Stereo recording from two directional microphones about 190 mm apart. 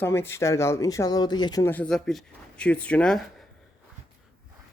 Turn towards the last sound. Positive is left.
turn(degrees=0)  # may be behind; listen again after turning